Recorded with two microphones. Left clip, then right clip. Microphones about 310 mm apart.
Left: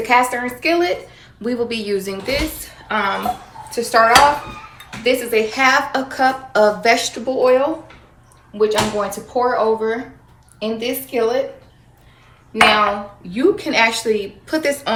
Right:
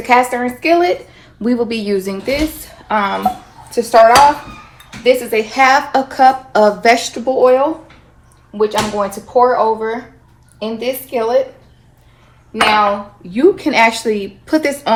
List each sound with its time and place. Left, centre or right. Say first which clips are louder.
0.0 s a woman's voice: right 3 dB; right
5.0 s a woman's voice: right 4 dB; right
13.3 s a woman's voice: right 4 dB; centre